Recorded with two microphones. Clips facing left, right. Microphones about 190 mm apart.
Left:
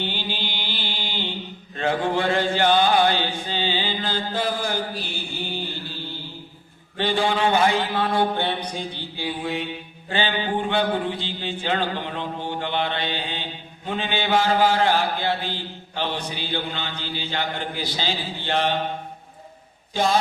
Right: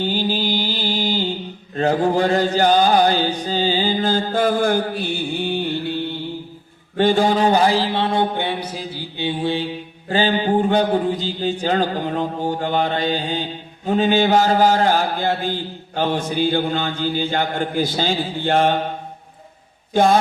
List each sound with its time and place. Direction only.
0.0 s mantra: 40° right (ahead or behind)
1.7 s chant: 40° right (ahead or behind); by 6.1 s 60° right (ahead or behind)
6.9 s a man's voice: 45° right (ahead or behind); by 9.0 s 5° right (ahead or behind)
9.1 s mantra: 30° right (ahead or behind)
10.1 s a sound: 40° right (ahead or behind)
19.9 s speech: 55° right (ahead or behind)